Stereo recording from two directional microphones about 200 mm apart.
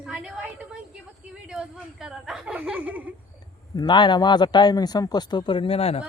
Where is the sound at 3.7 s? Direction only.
20° left (ahead or behind).